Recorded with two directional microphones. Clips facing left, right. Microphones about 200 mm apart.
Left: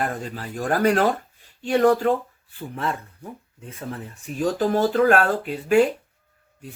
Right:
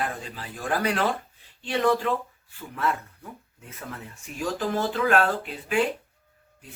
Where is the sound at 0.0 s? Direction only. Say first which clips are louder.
Left 4 dB; 45° left (ahead or behind).